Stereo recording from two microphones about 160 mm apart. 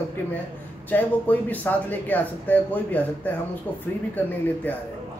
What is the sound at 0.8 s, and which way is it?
Speech, 10° left (ahead or behind).